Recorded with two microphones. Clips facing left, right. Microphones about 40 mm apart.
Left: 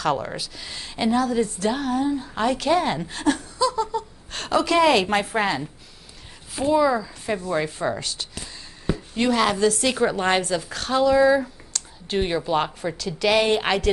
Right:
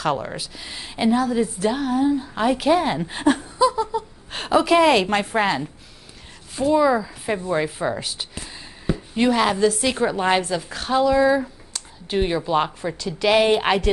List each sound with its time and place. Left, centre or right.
0.0 s a woman's voice: centre
3.1 s a woman's voice: right; by 5.7 s centre
6.7 s a woman's voice: centre